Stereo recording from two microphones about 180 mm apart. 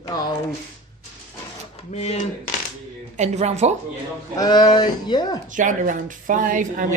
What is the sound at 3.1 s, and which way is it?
Speech, 40° right (ahead or behind).